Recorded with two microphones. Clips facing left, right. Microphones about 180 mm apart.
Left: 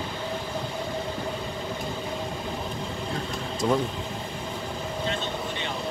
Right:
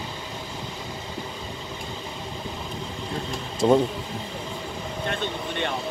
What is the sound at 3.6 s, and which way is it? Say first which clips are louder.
Speech: right 6 dB; 30° right (ahead or behind).